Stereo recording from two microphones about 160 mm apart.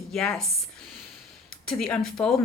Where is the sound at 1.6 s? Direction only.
5° left (ahead or behind).